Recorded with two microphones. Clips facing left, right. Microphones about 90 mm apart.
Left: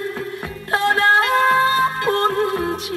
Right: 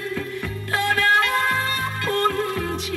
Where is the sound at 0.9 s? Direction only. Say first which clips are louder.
Left 3 dB; 20° left (ahead or behind).